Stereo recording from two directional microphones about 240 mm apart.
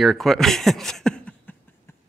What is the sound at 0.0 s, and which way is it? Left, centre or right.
Speech, centre.